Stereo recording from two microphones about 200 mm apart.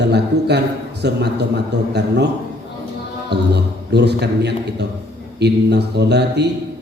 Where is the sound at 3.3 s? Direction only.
55° right (ahead or behind).